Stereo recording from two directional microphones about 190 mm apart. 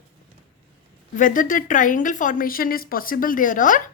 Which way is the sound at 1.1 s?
45° left (ahead or behind).